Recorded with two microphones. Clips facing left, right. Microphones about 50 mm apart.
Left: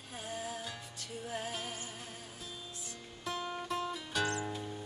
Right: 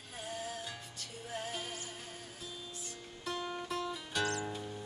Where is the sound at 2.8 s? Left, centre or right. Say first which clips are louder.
Left 1 dB; centre.